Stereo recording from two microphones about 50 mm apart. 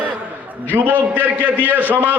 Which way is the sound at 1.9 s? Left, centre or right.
Right.